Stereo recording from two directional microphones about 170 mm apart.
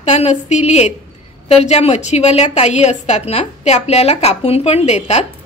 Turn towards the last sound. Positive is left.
turn(degrees=40)  # may be behind; listen again after turning